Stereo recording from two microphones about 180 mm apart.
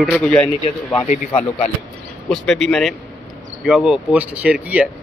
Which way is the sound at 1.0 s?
35° left (ahead or behind).